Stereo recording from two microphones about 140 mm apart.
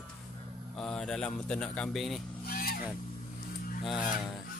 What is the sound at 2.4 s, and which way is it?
Vehicle, 90° left.